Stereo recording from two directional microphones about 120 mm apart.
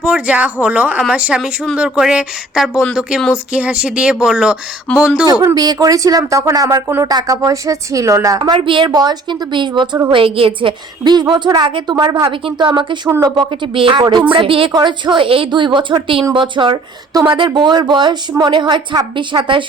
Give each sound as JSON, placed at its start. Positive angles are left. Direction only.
{"t": 0.0, "sound": "speech", "side_deg": -10}
{"t": 4.9, "sound": "speech", "side_deg": 10}
{"t": 5.2, "sound": "speech", "side_deg": -30}
{"t": 8.4, "sound": "speech", "side_deg": -45}
{"t": 14.7, "sound": "speech", "side_deg": -35}